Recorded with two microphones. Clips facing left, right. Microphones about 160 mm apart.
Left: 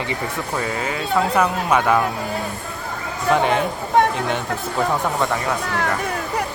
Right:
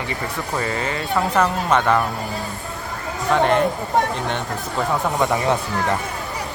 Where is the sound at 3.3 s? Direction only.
5° left (ahead or behind).